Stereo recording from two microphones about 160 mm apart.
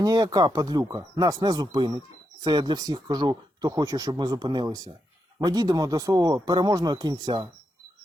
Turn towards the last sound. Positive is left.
turn(degrees=-25)  # may be behind; listen again after turning